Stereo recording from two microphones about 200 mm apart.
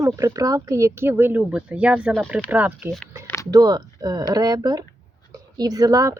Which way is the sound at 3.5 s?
20° right (ahead or behind).